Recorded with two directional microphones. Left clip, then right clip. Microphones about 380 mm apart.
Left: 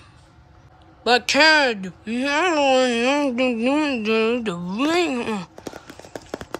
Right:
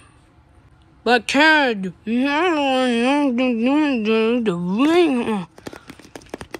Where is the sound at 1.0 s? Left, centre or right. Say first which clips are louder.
Right 1 dB; centre.